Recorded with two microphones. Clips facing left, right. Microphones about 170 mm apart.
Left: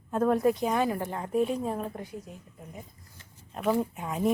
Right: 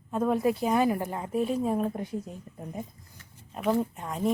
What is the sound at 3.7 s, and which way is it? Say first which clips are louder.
Speech: even; 5° left (ahead or behind).